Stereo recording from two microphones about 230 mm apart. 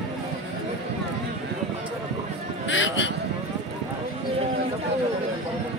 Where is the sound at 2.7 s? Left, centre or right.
Left.